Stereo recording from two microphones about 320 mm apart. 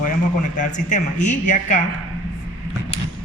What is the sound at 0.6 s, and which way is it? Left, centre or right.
A man's voice, left.